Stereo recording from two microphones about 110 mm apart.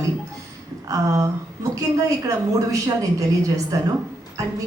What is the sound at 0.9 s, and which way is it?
A woman's voice, 30° right (ahead or behind).